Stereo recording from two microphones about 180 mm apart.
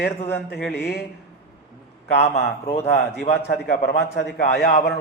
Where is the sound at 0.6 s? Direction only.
65° left (ahead or behind).